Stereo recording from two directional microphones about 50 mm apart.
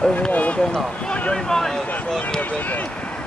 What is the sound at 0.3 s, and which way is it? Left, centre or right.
Run, left.